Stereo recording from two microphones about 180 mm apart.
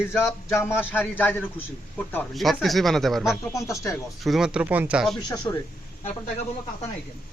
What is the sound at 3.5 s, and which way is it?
Speech, 15° left (ahead or behind).